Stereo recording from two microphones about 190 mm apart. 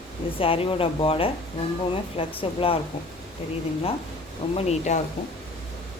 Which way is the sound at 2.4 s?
30° left (ahead or behind).